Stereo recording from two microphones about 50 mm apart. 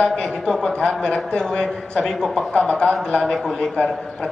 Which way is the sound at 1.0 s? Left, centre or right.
Centre.